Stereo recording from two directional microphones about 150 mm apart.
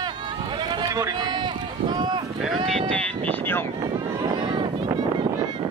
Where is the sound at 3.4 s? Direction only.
15° left (ahead or behind).